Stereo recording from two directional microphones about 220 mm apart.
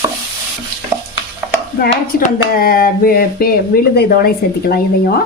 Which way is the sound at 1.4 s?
10° right (ahead or behind).